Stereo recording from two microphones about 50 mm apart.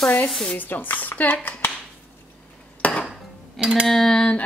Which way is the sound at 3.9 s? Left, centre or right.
Centre.